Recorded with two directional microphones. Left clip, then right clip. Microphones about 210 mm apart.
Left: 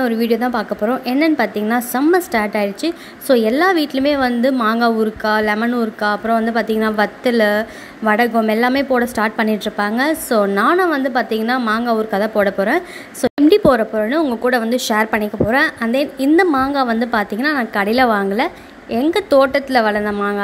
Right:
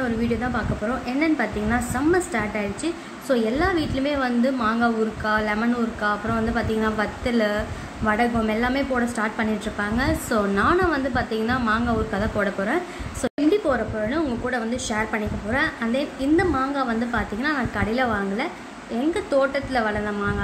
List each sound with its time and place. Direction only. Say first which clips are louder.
0.0 s a woman's voice: left 8 dB; 40° left (ahead or behind)